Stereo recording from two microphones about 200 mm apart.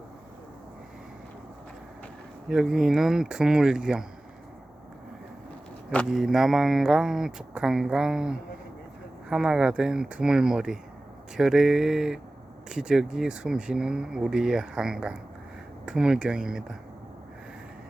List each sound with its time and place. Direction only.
2.5 s speech: centre (ahead or behind)
5.9 s speech: 5° left (ahead or behind)